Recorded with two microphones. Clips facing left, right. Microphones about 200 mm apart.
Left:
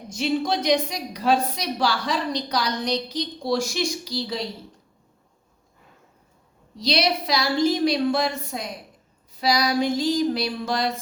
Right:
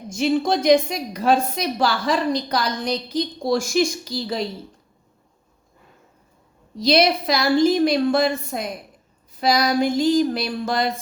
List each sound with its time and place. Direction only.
0.1 s a woman's voice: 45° right (ahead or behind)
6.7 s a woman's voice: 50° right (ahead or behind)